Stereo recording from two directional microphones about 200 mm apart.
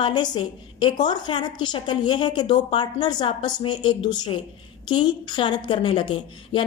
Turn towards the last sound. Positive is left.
turn(degrees=25)  # may be behind; listen again after turning